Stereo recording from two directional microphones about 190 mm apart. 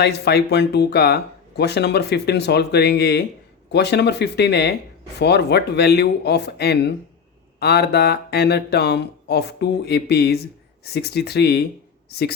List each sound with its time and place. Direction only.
0.0 s speech: 60° left (ahead or behind)